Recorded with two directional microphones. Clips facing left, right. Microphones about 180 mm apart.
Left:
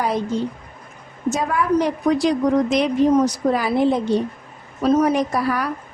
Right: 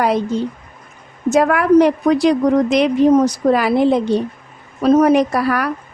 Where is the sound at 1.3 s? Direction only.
70° right (ahead or behind).